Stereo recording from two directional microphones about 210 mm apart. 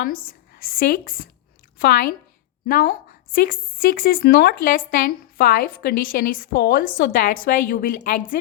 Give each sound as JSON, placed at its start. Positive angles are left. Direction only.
{"t": 0.3, "sound": "a woman's voice", "side_deg": 45}